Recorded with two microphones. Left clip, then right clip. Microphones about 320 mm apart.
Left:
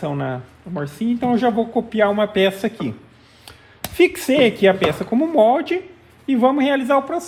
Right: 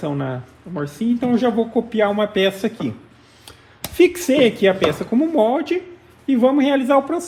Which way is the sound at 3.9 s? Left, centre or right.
Left.